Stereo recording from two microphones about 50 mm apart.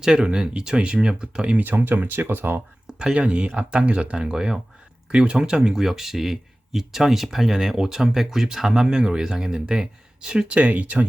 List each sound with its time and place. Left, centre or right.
0.0 s speech: centre
1.6 s speech: right
3.0 s speech: right